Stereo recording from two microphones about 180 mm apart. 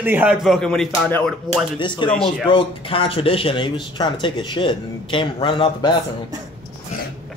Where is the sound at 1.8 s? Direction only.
25° left (ahead or behind).